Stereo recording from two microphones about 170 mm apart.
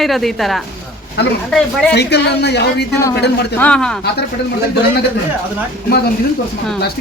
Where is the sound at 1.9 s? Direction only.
80° left.